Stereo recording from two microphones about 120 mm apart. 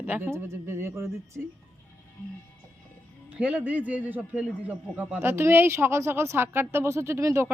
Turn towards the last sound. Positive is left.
turn(degrees=-25)  # may be behind; listen again after turning